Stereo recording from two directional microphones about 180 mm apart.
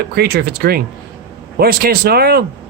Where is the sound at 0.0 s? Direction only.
60° right (ahead or behind).